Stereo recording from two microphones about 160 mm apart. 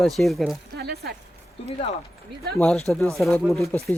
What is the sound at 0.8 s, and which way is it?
Speech, 80° right.